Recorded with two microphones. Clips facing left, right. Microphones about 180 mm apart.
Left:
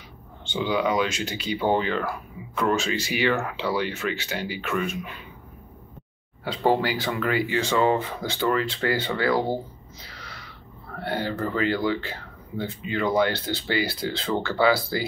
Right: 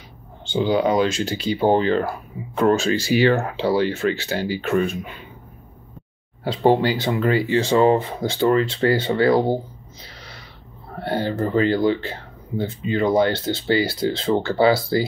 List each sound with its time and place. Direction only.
0.5 s speech: 35° right (ahead or behind)
6.4 s speech: 25° right (ahead or behind)
11.0 s speech: 30° right (ahead or behind)